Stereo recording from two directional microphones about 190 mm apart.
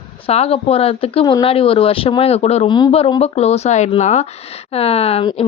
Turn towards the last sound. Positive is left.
turn(degrees=30)  # may be behind; listen again after turning